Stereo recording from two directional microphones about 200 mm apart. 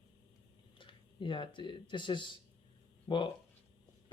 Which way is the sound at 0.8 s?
25° left (ahead or behind).